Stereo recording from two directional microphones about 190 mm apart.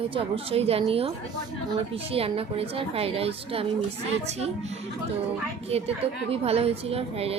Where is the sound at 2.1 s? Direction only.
30° right (ahead or behind).